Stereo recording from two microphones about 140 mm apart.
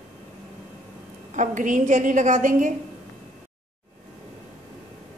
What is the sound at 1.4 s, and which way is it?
A woman's voice, 65° right (ahead or behind).